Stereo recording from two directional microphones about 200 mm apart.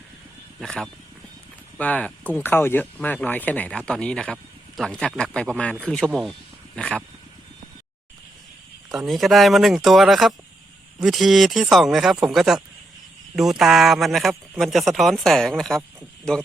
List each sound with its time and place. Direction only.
0.6 s a man's voice: 5° left (ahead or behind)
8.9 s a man's voice: centre (ahead or behind)